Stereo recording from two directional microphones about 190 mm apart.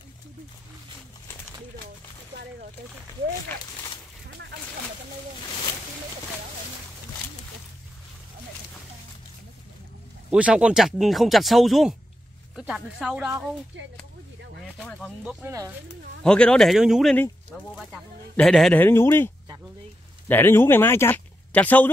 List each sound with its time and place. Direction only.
10.3 s speech: 5° right (ahead or behind)
13.7 s speech: 75° right (ahead or behind)
14.8 s speech: 5° left (ahead or behind)
15.4 s speech: 15° right (ahead or behind)
16.2 s a man's voice: 5° left (ahead or behind)